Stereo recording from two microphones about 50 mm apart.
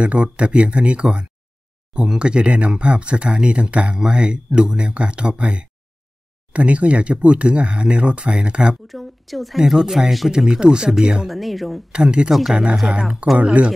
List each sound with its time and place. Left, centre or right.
0.0 s speech: right
8.8 s speech: centre
11.2 s speech: centre
11.9 s speech: centre
12.3 s speech: centre
13.4 s speech: right